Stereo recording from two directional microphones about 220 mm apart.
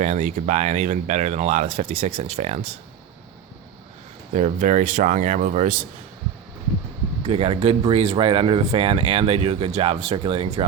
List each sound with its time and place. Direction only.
0.0 s speech: 30° right (ahead or behind)
4.4 s speech: 35° right (ahead or behind)
7.3 s speech: 25° right (ahead or behind)